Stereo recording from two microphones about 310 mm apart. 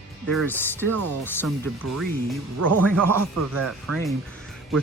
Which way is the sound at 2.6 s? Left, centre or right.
Right.